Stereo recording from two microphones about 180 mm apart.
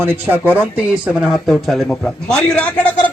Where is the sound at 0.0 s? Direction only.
10° right (ahead or behind); by 2.9 s 5° left (ahead or behind).